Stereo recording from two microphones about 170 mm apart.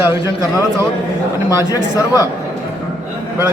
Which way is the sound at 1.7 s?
20° left (ahead or behind).